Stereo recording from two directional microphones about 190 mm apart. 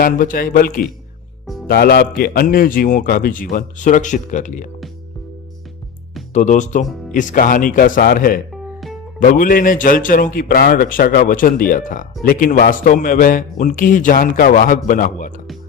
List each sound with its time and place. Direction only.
0.0 s a man's voice: 45° left (ahead or behind)
6.3 s a man's voice: 40° left (ahead or behind)